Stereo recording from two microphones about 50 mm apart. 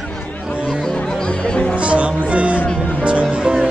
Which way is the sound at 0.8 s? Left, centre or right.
Centre.